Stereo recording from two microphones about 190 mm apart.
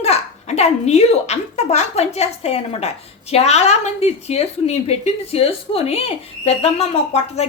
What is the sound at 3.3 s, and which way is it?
A woman's voice, 35° left (ahead or behind).